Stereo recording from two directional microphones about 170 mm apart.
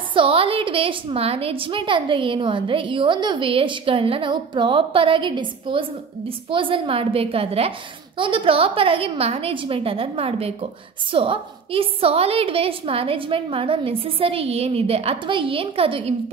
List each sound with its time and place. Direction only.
0.1 s a woman's voice: 30° right (ahead or behind)